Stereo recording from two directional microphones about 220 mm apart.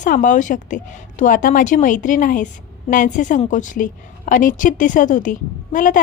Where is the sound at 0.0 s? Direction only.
35° left (ahead or behind).